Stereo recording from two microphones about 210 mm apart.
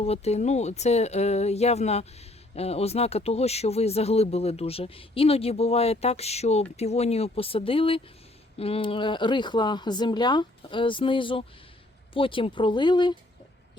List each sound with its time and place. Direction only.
0.0 s speech: 30° left (ahead or behind)